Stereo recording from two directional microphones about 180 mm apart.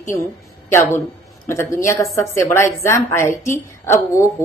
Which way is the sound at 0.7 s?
15° left (ahead or behind).